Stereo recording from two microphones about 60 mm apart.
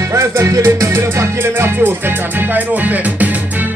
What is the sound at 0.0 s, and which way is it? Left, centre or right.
Music, right.